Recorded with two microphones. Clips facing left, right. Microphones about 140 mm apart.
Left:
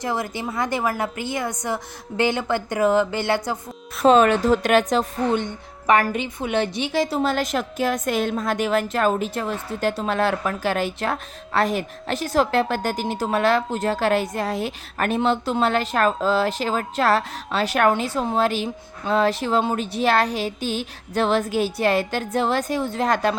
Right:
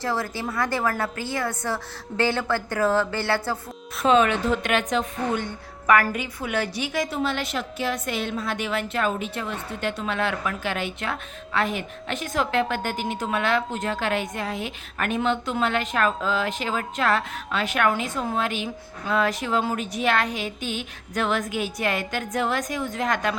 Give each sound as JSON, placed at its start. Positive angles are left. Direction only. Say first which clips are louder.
{"t": 0.0, "sound": "a woman's voice", "louder": "left 1 dB", "side_deg": 20}
{"t": 4.0, "sound": "a woman's voice", "louder": "left 4 dB", "side_deg": 40}
{"t": 5.3, "sound": "a woman's voice", "louder": "left 4 dB", "side_deg": 25}